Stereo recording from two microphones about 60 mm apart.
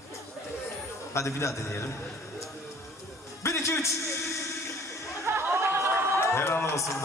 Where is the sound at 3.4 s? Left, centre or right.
Left.